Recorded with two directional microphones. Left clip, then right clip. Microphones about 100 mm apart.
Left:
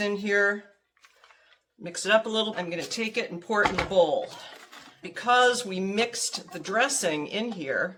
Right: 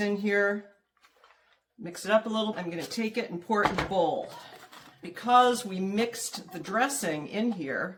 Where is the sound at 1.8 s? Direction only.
40° left (ahead or behind).